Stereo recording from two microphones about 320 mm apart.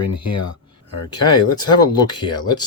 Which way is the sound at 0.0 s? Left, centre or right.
Left.